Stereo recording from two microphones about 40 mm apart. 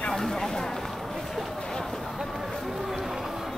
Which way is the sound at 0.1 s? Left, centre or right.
Centre.